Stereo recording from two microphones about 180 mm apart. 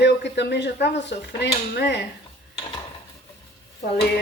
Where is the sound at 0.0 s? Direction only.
70° left (ahead or behind).